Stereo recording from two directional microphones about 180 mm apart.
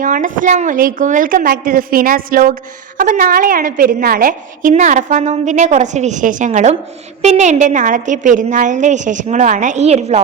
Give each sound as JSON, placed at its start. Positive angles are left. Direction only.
{"t": 0.0, "sound": "a woman's voice", "side_deg": -45}